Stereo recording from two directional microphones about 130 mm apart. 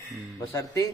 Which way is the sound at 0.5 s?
25° left (ahead or behind).